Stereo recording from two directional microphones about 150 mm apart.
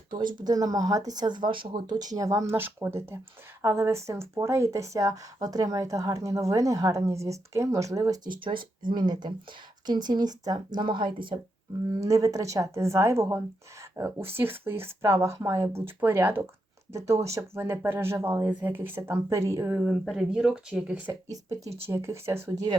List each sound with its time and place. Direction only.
0.4 s speech: 25° right (ahead or behind)
12.0 s speech: 20° right (ahead or behind)
19.8 s speech: 5° right (ahead or behind)
21.1 s speech: 20° right (ahead or behind)